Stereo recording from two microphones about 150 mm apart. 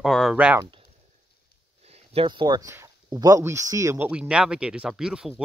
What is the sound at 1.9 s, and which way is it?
Speech, 40° right (ahead or behind).